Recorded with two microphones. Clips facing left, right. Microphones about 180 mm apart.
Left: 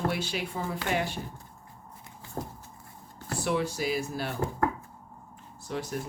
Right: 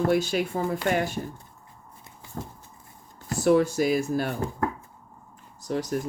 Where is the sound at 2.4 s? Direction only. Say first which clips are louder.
Left 1 dB; 30° left (ahead or behind).